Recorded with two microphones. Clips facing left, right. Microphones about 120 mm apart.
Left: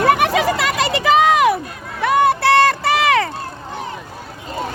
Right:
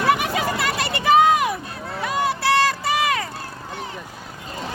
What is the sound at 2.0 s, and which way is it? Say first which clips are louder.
Run: left 7 dB; 60° left (ahead or behind).